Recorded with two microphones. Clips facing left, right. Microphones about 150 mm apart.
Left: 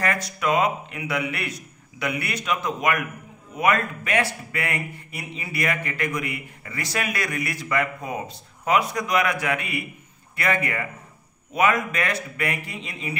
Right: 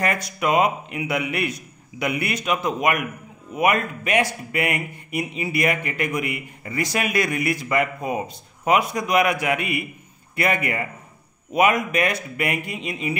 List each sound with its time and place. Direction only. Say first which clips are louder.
0.0 s speech: right 2 dB; 15° right (ahead or behind)